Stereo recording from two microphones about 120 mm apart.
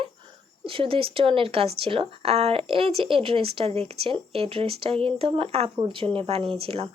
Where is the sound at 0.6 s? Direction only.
50° right (ahead or behind).